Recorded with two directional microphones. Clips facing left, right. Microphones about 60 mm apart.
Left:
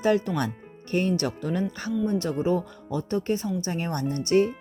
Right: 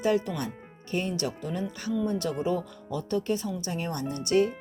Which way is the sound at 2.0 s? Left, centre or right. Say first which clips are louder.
Left 4 dB; left.